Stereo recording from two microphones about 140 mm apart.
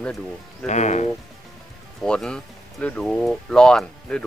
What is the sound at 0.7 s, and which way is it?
Speech, 60° left (ahead or behind).